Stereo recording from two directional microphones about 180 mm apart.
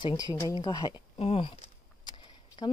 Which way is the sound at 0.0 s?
20° left (ahead or behind).